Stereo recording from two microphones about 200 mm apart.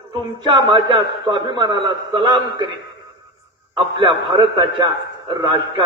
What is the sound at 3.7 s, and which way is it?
A man's voice, 25° right (ahead or behind).